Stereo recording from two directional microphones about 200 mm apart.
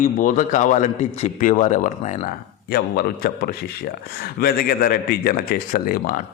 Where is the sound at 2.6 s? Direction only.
50° left (ahead or behind).